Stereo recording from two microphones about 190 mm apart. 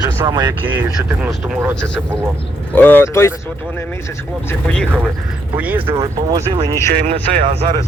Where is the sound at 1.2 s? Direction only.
5° right (ahead or behind); by 3.3 s 15° left (ahead or behind).